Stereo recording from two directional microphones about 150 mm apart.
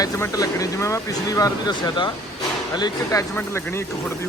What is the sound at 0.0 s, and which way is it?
Speech, 20° left (ahead or behind).